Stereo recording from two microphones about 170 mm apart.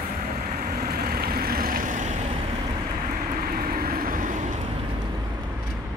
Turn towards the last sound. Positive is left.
turn(degrees=-55)  # may be behind; listen again after turning